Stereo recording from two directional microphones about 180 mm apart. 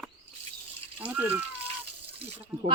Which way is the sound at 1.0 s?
10° right (ahead or behind).